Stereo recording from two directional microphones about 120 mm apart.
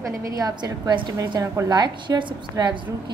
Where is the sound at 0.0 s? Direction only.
30° right (ahead or behind).